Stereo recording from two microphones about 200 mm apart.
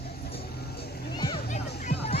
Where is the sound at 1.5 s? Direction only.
35° left (ahead or behind).